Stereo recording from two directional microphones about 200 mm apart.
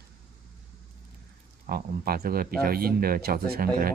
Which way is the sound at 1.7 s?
50° right (ahead or behind).